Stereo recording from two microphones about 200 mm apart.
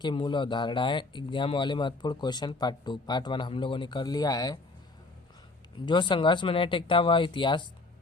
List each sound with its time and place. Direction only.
0.0 s speech: 25° left (ahead or behind)
5.8 s speech: 25° left (ahead or behind)